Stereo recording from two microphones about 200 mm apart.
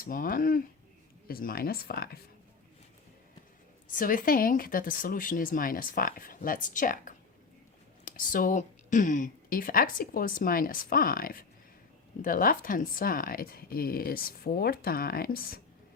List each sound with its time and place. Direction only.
0.0 s speech: 45° left (ahead or behind)
3.9 s speech: 45° left (ahead or behind)